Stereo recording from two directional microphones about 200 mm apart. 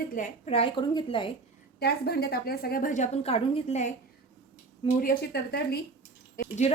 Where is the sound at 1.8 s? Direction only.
55° left (ahead or behind); by 3.9 s 35° left (ahead or behind).